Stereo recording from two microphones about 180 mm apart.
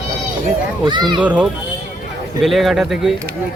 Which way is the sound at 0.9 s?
25° right (ahead or behind).